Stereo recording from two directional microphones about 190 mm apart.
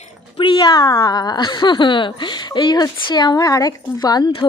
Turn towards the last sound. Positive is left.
turn(degrees=20)  # may be behind; listen again after turning